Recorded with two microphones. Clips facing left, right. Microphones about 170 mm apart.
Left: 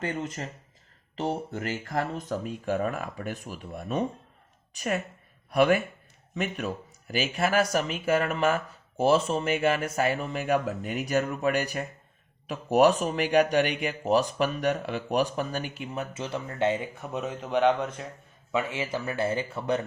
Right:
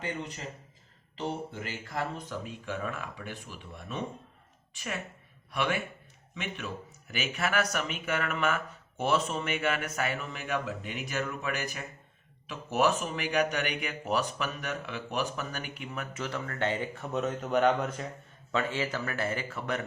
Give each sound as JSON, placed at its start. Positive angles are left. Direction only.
{"t": 0.0, "sound": "a woman's voice", "side_deg": 45}
{"t": 17.2, "sound": "speech", "side_deg": 0}
{"t": 18.5, "sound": "speech", "side_deg": 15}